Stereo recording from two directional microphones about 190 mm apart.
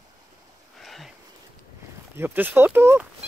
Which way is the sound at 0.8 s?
Centre (ahead or behind).